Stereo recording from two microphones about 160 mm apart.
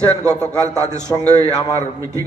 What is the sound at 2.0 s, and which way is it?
Speech, 20° right (ahead or behind).